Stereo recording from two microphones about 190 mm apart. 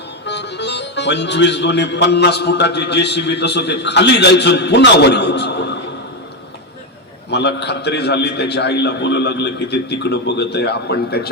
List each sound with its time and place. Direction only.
0.3 s speech: 65° left (ahead or behind)
7.3 s speech: 60° left (ahead or behind)